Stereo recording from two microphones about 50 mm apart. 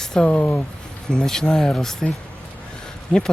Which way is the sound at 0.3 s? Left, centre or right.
Left.